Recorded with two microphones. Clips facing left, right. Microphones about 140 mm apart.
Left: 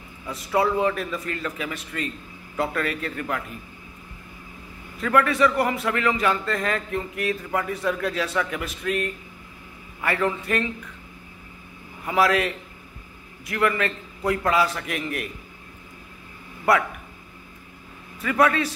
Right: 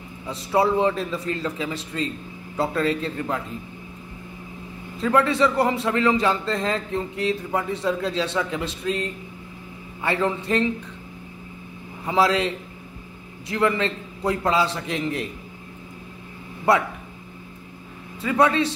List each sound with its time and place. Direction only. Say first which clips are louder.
0.3 s a man's voice: right 2 dB; 30° right (ahead or behind)
4.9 s a man's voice: right 1 dB; 25° right (ahead or behind)
12.1 s a man's voice: right 1 dB; 25° right (ahead or behind)
16.7 s a man's voice: right 1 dB; 25° right (ahead or behind)
18.2 s a man's voice: right 1 dB; 25° right (ahead or behind)